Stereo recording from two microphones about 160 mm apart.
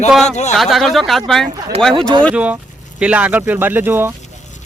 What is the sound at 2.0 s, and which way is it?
Speech, 30° right (ahead or behind).